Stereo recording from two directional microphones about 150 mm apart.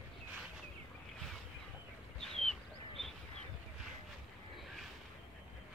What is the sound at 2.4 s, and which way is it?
Bird, centre (ahead or behind).